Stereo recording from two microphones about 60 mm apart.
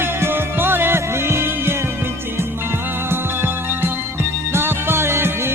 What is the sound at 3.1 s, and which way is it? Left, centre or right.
Music, right.